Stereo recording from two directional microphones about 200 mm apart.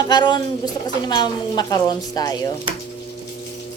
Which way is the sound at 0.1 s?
20° left (ahead or behind).